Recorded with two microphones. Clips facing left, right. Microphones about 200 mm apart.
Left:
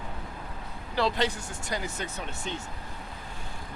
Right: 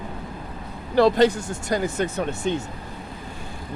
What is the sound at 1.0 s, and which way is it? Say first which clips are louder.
Speech: right 11 dB; 45° right (ahead or behind).